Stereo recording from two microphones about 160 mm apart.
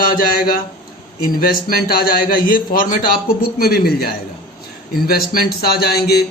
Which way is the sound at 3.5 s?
75° left (ahead or behind).